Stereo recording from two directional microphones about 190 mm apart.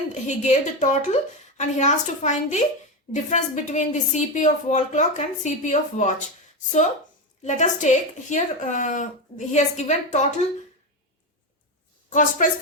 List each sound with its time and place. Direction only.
0.1 s a woman's voice: 35° left (ahead or behind)
7.4 s a woman's voice: 40° left (ahead or behind)
12.1 s a woman's voice: 45° left (ahead or behind)